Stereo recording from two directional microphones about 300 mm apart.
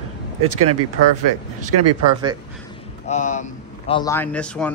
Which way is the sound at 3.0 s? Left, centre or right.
Left.